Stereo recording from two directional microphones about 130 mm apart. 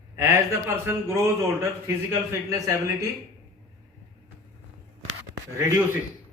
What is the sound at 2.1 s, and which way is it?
Speech, 25° right (ahead or behind).